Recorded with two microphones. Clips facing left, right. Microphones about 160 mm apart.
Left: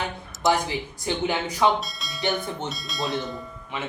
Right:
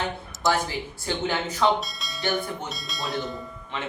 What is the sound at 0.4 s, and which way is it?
Speech, 20° left (ahead or behind).